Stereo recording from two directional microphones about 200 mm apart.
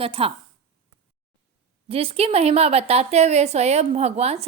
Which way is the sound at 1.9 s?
30° right (ahead or behind).